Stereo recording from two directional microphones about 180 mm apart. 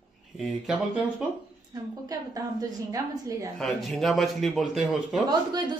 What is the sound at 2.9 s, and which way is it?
Speech, 20° right (ahead or behind).